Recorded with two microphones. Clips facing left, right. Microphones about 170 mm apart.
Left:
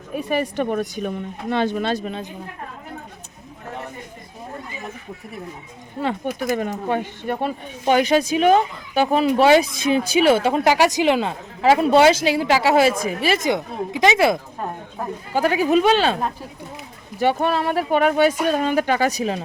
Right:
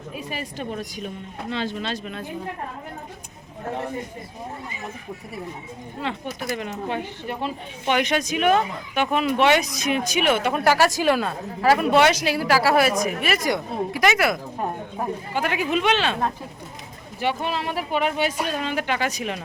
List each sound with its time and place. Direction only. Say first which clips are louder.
0.1 s speech: left 10 dB; 60° left (ahead or behind)
6.0 s speech: left 6 dB; 45° left (ahead or behind)
7.9 s speech: left 5 dB; 35° left (ahead or behind)
14.6 s a sound: right 1 dB; 10° right (ahead or behind)
15.3 s speech: left 8 dB; 35° left (ahead or behind)
17.2 s speech: left 6 dB; 45° left (ahead or behind)